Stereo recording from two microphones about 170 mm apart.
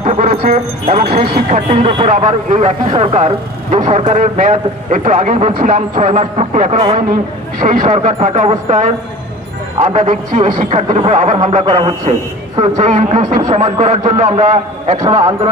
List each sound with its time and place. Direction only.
0.0 s music: 35° right (ahead or behind)
0.3 s a man's voice: 60° right (ahead or behind); by 2.0 s 35° right (ahead or behind)
2.0 s a man's voice: 45° right (ahead or behind)
11.6 s a man's voice: 30° right (ahead or behind)
12.1 s a man's voice: 40° right (ahead or behind)
15.0 s a man's voice: 30° right (ahead or behind)